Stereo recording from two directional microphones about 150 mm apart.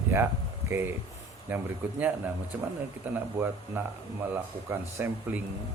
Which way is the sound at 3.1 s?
15° right (ahead or behind).